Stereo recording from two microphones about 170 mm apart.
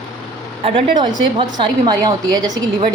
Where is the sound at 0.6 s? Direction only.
30° right (ahead or behind).